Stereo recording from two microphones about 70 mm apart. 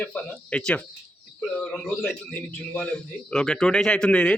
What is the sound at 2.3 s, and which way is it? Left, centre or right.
A man's voice, left.